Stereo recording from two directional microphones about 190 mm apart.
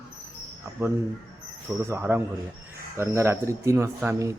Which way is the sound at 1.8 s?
10° right (ahead or behind).